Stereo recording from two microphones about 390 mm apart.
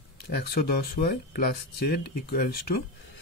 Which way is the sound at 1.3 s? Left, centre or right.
Left.